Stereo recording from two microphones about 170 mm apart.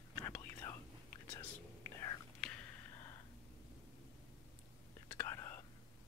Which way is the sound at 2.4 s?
5° left (ahead or behind).